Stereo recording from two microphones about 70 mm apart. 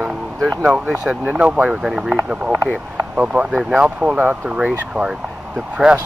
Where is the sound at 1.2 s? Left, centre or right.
Right.